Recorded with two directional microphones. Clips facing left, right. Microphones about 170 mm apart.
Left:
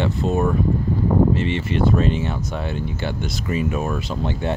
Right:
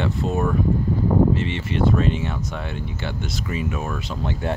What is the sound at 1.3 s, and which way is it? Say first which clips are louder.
Speech: left 3 dB; 40° left (ahead or behind).